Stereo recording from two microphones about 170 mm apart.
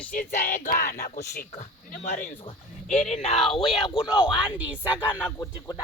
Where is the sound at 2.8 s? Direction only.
45° left (ahead or behind).